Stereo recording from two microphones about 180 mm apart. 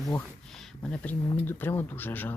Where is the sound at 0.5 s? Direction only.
5° left (ahead or behind).